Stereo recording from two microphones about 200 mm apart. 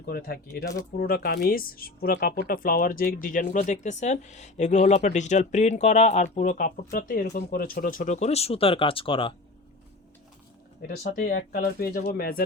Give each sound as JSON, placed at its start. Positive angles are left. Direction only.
{"t": 0.0, "sound": "speech", "side_deg": 50}
{"t": 10.8, "sound": "speech", "side_deg": 45}